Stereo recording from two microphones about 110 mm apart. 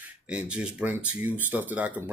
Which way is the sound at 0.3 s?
10° right (ahead or behind).